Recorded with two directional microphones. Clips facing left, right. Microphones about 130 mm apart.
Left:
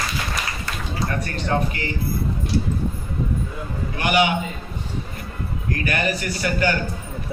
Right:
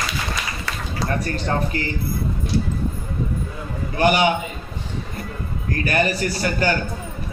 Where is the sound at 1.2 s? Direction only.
40° right (ahead or behind).